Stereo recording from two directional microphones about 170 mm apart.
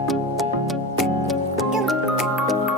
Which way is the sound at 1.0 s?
Centre (ahead or behind).